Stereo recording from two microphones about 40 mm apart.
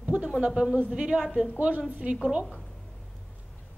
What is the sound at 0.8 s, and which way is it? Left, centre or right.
Speech, right.